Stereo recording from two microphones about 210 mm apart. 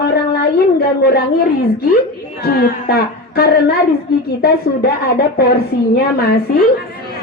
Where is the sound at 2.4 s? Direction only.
50° left (ahead or behind).